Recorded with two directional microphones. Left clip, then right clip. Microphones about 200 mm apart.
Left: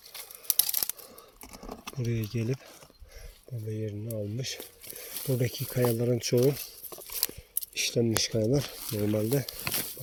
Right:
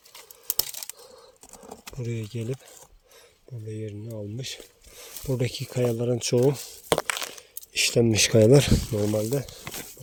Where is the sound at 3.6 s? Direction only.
15° right (ahead or behind).